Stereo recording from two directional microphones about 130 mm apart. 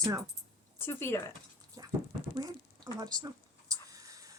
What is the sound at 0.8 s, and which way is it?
Speech, 20° left (ahead or behind).